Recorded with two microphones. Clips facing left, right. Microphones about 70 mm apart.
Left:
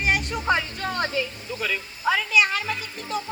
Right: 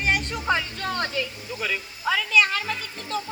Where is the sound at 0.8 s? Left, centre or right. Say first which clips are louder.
Left 1 dB; left.